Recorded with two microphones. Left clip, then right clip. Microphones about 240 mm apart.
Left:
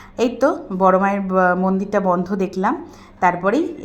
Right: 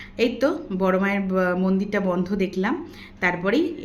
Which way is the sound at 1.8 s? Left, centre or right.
Centre.